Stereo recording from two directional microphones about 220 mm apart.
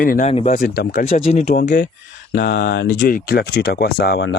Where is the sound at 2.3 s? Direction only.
50° left (ahead or behind).